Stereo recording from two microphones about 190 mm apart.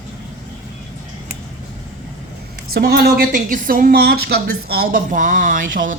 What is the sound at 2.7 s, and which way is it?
A woman's voice, 55° right (ahead or behind).